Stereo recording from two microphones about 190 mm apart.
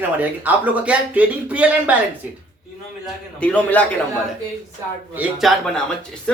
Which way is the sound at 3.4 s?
5° left (ahead or behind).